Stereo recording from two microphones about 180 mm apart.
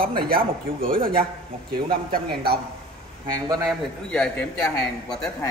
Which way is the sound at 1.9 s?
55° right (ahead or behind).